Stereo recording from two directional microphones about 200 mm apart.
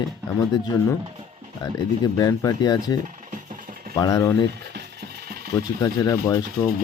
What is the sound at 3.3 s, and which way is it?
Vehicle, 40° right (ahead or behind).